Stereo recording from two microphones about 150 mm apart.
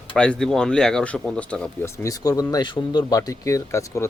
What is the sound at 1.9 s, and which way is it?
Speech, 20° left (ahead or behind).